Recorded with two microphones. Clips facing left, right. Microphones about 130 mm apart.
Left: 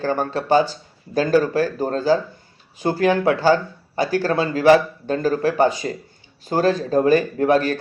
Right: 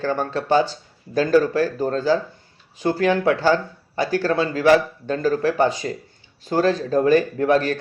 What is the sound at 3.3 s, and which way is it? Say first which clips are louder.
Speech: left 2 dB; 5° left (ahead or behind).